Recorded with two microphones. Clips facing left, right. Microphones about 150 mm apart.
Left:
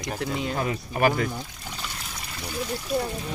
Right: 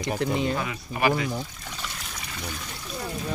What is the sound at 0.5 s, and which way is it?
Speech, 40° left (ahead or behind).